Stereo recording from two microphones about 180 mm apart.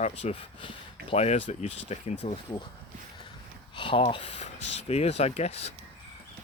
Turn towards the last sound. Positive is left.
turn(degrees=35)  # may be behind; listen again after turning